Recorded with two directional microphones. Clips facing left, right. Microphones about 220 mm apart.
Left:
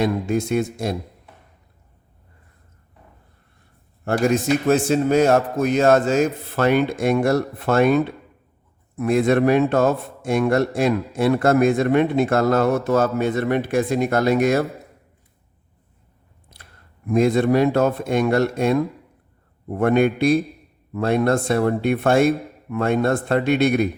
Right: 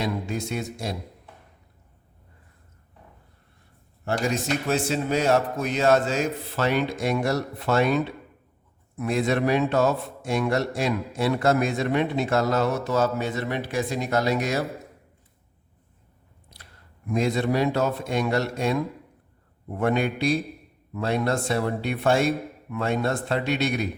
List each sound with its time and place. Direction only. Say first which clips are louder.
0.0 s a man's voice: left 7 dB; 50° left (ahead or behind)
4.0 s a man's voice: left 7 dB; 55° left (ahead or behind)
16.5 s a sound: left 2 dB; 55° left (ahead or behind)
17.1 s a man's voice: left 7 dB; 50° left (ahead or behind)